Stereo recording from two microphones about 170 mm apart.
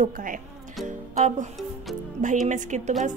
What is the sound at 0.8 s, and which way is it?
Music, 45° right (ahead or behind).